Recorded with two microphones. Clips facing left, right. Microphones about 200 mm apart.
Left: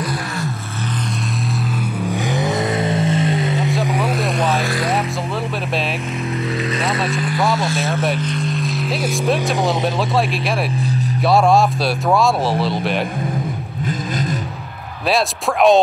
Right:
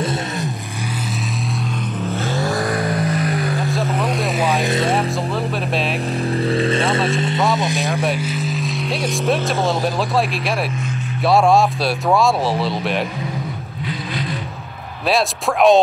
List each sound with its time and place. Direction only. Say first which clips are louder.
2.0 s vehicle: left 1 dB; 15° left (ahead or behind)
3.9 s vehicle: left 1 dB; 5° left (ahead or behind)
4.6 s music: right 2 dB; 25° right (ahead or behind)
6.3 s vehicle: right 5 dB; 30° right (ahead or behind)
8.0 s speech: left 1 dB; 5° right (ahead or behind)
11.2 s speech: even; centre (ahead or behind)
15.0 s speech: even; centre (ahead or behind)